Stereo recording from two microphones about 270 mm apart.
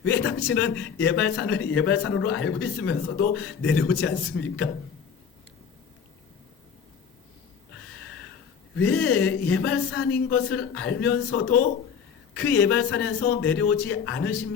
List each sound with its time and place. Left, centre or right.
0.0 s a man's voice: left
8.7 s a woman's voice: left